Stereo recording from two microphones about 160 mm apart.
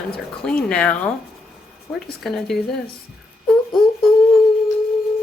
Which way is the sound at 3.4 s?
Centre (ahead or behind).